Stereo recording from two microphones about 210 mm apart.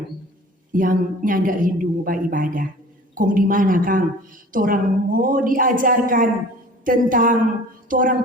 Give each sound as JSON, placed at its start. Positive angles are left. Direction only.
{"t": 0.7, "sound": "a woman's voice", "side_deg": -40}